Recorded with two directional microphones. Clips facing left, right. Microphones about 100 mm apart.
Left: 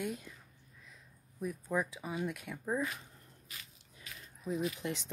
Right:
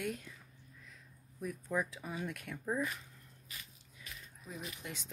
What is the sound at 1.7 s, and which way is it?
Speech, 10° left (ahead or behind).